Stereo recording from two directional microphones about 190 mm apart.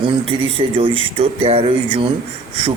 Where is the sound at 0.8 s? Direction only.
25° right (ahead or behind).